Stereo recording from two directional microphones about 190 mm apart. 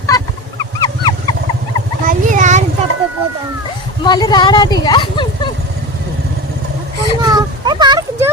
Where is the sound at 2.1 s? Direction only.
40° right (ahead or behind).